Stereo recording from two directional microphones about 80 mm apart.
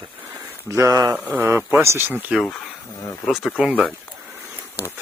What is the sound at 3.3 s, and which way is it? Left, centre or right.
Speech, centre.